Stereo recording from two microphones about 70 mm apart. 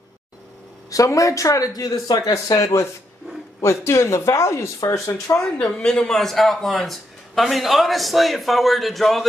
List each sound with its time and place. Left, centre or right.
0.8 s speech: left
2.3 s speech: left
5.4 s speech: centre